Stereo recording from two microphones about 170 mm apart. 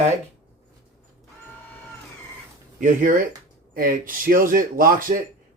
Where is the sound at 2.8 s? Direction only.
50° right (ahead or behind).